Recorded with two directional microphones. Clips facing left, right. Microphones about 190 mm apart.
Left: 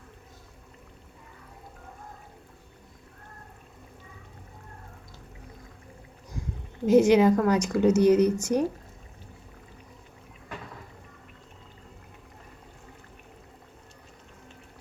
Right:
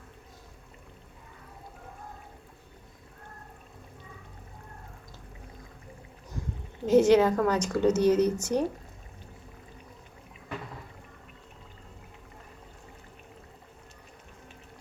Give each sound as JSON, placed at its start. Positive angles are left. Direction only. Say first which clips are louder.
{"t": 6.8, "sound": "speech", "louder": "left 2 dB", "side_deg": 10}